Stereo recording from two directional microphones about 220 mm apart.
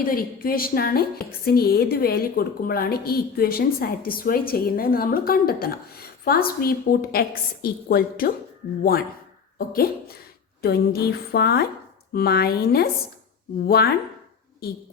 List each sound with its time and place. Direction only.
0.0 s a woman's voice: 40° left (ahead or behind)
9.6 s a woman's voice: 45° left (ahead or behind)